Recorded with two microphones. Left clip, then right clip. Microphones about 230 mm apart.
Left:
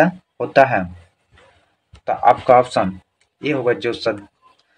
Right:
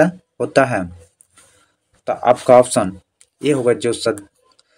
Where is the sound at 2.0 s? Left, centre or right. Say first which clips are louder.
Left 1 dB; right.